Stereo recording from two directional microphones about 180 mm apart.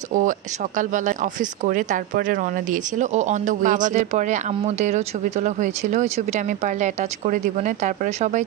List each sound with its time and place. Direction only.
0.1 s speech: 45° right (ahead or behind)